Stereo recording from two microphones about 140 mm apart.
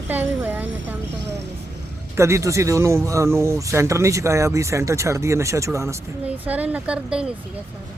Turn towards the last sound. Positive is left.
turn(degrees=-5)  # may be behind; listen again after turning